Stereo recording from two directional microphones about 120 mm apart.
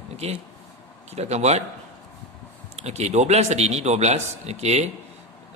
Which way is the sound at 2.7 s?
70° right (ahead or behind).